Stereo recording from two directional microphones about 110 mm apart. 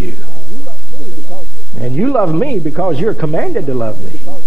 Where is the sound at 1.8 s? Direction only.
15° left (ahead or behind).